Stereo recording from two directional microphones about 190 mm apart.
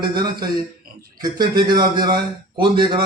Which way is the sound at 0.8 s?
55° right (ahead or behind).